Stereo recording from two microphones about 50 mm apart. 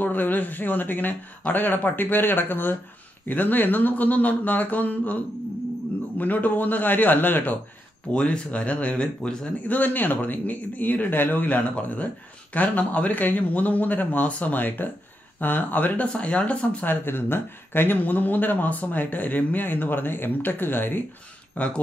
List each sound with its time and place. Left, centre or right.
0.0 s speech: left
8.1 s speech: left
9.7 s speech: left
16.8 s speech: left
21.6 s speech: left